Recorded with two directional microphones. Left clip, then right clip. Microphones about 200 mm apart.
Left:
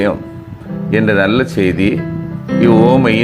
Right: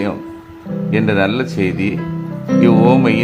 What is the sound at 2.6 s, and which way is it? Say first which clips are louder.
Music: left 2 dB; 10° left (ahead or behind).